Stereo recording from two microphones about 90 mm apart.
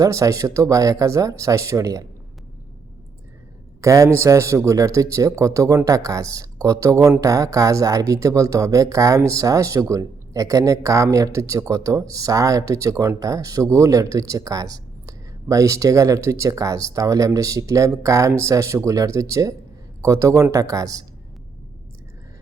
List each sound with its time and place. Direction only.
0.0 s speech: 35° right (ahead or behind)
3.8 s speech: 35° right (ahead or behind)